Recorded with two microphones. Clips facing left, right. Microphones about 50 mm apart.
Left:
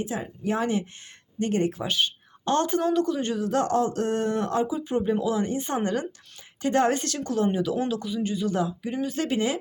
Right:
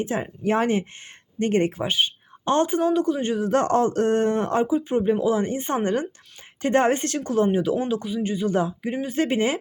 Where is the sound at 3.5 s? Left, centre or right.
Right.